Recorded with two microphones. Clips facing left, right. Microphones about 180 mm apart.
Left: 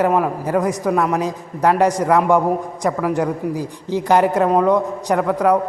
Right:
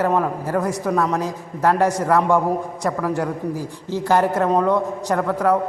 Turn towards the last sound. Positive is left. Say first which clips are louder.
# left 3 dB
turn(degrees=15)  # may be behind; listen again after turning